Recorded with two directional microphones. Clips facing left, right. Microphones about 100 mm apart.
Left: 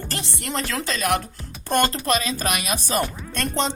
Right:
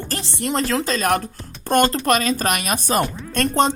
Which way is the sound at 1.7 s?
45° right (ahead or behind).